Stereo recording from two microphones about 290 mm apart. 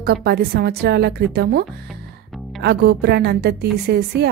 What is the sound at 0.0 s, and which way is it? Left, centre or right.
A woman's voice, right.